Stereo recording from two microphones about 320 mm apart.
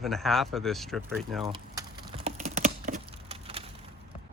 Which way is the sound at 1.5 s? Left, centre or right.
Centre.